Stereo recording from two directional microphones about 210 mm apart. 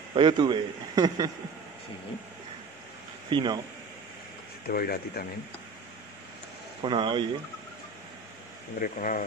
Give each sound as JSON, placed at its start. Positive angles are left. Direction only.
{"t": 0.1, "sound": "a man's voice", "side_deg": -25}
{"t": 3.3, "sound": "a man's voice", "side_deg": -20}
{"t": 4.6, "sound": "speech", "side_deg": 45}
{"t": 6.8, "sound": "a man's voice", "side_deg": -20}
{"t": 8.7, "sound": "speech", "side_deg": 40}